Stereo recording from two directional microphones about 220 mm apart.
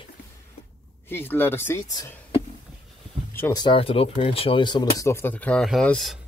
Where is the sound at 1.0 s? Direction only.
10° left (ahead or behind).